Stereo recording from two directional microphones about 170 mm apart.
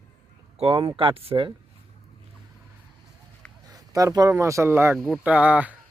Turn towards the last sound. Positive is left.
turn(degrees=-10)  # may be behind; listen again after turning